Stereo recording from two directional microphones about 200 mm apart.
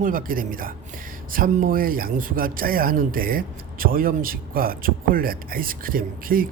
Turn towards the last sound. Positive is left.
turn(degrees=-45)  # may be behind; listen again after turning